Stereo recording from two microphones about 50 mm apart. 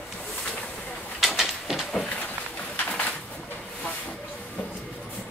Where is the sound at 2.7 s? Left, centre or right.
Left.